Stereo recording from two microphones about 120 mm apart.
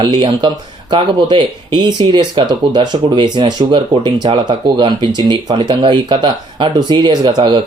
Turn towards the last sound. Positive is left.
turn(degrees=-40)  # may be behind; listen again after turning